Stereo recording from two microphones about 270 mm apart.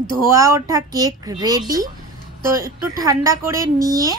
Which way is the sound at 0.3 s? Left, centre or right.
Centre.